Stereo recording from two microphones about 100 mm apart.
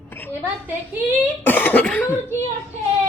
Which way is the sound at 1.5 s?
20° left (ahead or behind).